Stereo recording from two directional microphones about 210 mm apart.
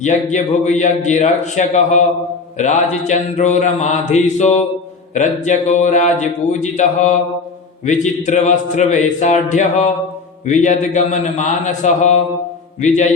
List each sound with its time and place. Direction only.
0.0 s a man's voice: 35° left (ahead or behind)